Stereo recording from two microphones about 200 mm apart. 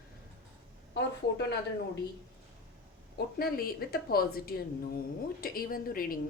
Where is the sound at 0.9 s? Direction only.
60° left (ahead or behind).